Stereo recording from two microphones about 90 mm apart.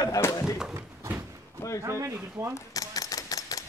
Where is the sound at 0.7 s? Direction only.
30° right (ahead or behind).